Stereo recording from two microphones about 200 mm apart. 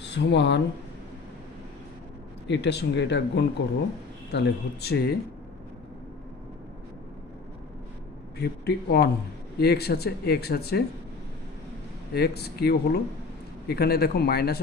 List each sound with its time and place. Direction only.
0.0 s speech: 60° left (ahead or behind)
2.4 s speech: 60° left (ahead or behind)
8.4 s speech: 50° left (ahead or behind)
12.1 s speech: 55° left (ahead or behind)